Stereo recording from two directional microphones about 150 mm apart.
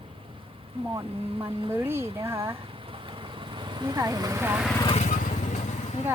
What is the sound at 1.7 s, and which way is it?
Speech, 15° right (ahead or behind).